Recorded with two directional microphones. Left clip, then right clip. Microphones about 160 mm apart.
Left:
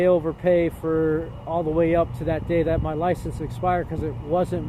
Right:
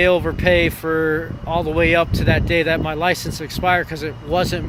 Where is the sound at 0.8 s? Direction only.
25° right (ahead or behind).